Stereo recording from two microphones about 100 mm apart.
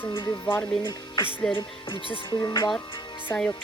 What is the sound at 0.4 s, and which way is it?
Speech, 25° left (ahead or behind).